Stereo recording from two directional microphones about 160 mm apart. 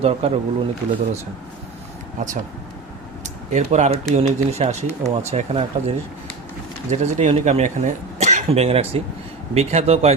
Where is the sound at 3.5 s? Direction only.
45° right (ahead or behind).